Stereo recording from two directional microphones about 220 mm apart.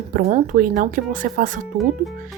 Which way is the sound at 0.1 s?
35° right (ahead or behind).